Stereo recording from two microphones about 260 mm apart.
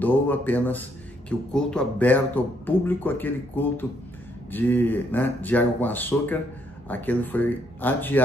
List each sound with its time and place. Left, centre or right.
0.0 s speech: centre